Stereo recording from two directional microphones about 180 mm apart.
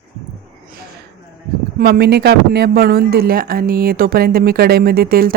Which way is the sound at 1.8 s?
60° right (ahead or behind).